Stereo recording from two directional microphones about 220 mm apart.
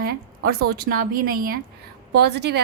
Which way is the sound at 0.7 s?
40° right (ahead or behind).